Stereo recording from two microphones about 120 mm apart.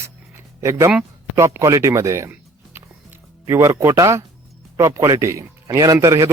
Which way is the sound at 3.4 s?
25° right (ahead or behind).